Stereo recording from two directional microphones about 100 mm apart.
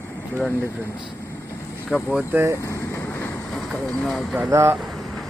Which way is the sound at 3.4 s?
5° left (ahead or behind).